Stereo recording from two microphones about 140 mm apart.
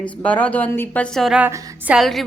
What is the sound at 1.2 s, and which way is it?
A woman's voice, 10° right (ahead or behind).